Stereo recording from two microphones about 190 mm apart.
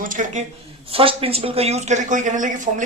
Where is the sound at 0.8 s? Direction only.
30° right (ahead or behind).